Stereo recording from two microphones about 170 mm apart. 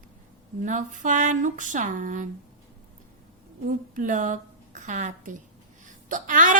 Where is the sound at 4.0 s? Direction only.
45° right (ahead or behind).